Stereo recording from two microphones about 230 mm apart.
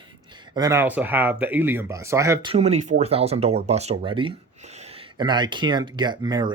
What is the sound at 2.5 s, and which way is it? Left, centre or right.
Speech, right.